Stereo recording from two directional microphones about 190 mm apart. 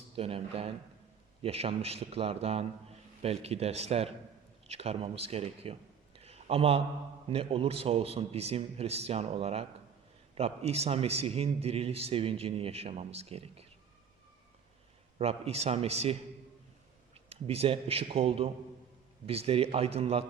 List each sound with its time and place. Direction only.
0.2 s a man's voice: 30° right (ahead or behind)
6.1 s a sound: 30° right (ahead or behind)
7.3 s a man's voice: 30° right (ahead or behind)
15.2 s a man's voice: 30° right (ahead or behind)
17.2 s a man's voice: 30° right (ahead or behind)